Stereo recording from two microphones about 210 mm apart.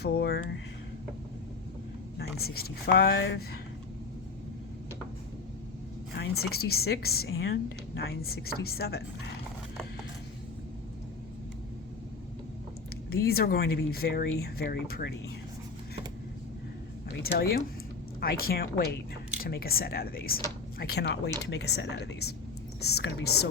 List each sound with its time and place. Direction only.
0.0 s a woman's voice: 50° left (ahead or behind)
2.4 s a woman's voice: 45° left (ahead or behind)
6.1 s a woman's voice: 50° left (ahead or behind)
13.1 s a woman's voice: 45° left (ahead or behind)
17.2 s a woman's voice: 45° left (ahead or behind)